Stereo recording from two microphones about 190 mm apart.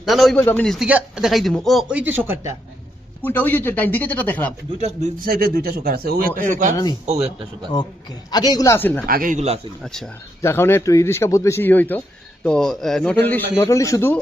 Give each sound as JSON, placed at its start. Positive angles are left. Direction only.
{"t": 0.0, "sound": "speech", "side_deg": 0}
{"t": 3.2, "sound": "a man's voice", "side_deg": 10}
{"t": 5.2, "sound": "speech", "side_deg": -50}
{"t": 7.7, "sound": "a man's voice", "side_deg": 20}
{"t": 9.0, "sound": "speech", "side_deg": -50}
{"t": 9.8, "sound": "speech", "side_deg": 0}
{"t": 10.4, "sound": "a man's voice", "side_deg": 10}